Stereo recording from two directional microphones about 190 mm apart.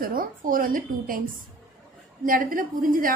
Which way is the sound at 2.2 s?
45° right (ahead or behind).